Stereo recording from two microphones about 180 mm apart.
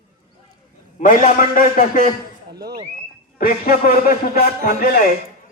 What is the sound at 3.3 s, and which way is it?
A man's voice, 55° left (ahead or behind).